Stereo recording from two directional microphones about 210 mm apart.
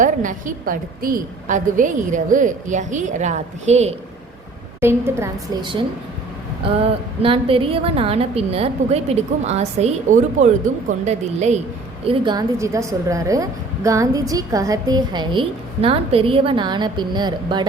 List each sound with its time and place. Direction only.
0.0 s a woman's voice: 40° right (ahead or behind)
4.8 s a woman's voice: 10° right (ahead or behind)
7.2 s a woman's voice: 25° right (ahead or behind)
12.0 s a woman's voice: 20° right (ahead or behind)